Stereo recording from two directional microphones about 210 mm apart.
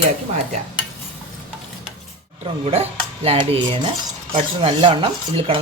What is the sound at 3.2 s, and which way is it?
Speech, 30° right (ahead or behind).